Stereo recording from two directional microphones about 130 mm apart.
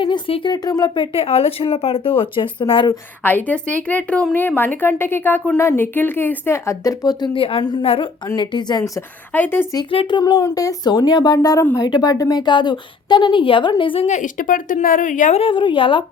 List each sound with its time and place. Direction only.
0.0 s speech: 40° left (ahead or behind)
0.5 s a woman's voice: 30° left (ahead or behind)
1.1 s speech: 50° left (ahead or behind)
3.2 s a woman's voice: 10° left (ahead or behind); by 7.3 s 30° left (ahead or behind)
7.3 s a woman's voice: 45° left (ahead or behind)
8.8 s a woman's voice: 15° left (ahead or behind)
9.9 s a woman's voice: 40° left (ahead or behind)
14.1 s speech: 80° left
15.4 s a woman's voice: 40° left (ahead or behind)